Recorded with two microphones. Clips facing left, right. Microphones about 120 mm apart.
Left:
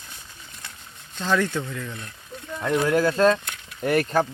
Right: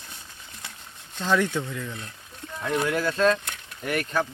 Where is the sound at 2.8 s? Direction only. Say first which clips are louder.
Left 4 dB; 40° left (ahead or behind).